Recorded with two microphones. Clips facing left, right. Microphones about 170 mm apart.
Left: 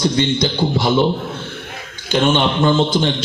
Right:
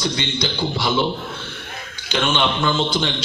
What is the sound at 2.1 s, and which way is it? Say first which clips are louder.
A man's voice: left 5 dB; 45° left (ahead or behind).